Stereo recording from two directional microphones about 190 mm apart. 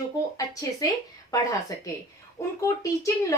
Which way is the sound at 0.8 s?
20° left (ahead or behind).